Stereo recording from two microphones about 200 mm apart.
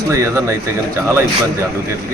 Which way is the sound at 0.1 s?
15° right (ahead or behind).